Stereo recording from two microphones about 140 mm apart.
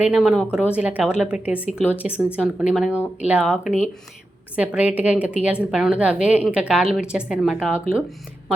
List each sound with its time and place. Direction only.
0.1 s speech: 5° right (ahead or behind)